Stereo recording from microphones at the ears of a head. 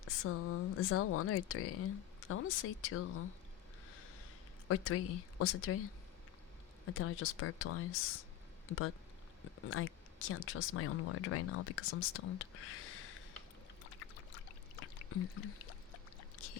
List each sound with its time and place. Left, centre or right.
0.0 s speech: left
4.7 s speech: left
13.9 s pour: left